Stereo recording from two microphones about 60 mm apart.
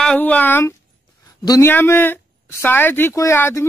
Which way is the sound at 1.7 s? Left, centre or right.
Left.